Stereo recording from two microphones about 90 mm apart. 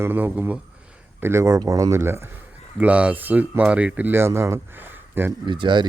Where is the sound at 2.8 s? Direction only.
15° right (ahead or behind).